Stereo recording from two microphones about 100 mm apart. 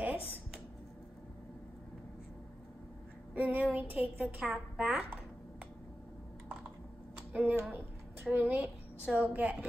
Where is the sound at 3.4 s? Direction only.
15° right (ahead or behind).